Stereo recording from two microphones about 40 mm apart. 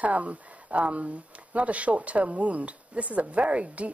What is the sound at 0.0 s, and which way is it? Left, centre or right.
Speech, right.